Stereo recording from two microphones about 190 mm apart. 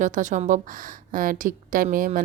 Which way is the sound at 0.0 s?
40° right (ahead or behind).